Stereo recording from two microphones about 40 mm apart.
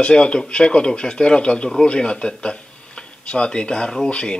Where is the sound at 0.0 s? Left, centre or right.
Left.